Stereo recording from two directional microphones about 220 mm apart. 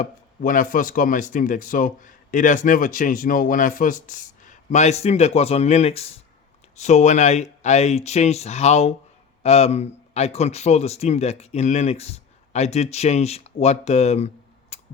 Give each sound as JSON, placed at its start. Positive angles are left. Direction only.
{"t": 0.0, "sound": "speech", "side_deg": 40}